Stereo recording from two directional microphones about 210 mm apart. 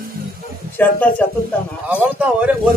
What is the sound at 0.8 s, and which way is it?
Speech, 10° left (ahead or behind).